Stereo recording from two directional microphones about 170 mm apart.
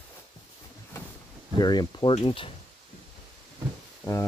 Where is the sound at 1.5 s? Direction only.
25° left (ahead or behind).